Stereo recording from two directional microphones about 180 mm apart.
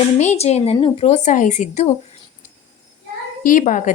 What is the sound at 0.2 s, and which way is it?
Speech, 40° left (ahead or behind).